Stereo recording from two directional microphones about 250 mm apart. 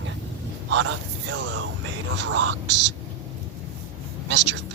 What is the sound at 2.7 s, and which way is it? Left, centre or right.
Speech, right.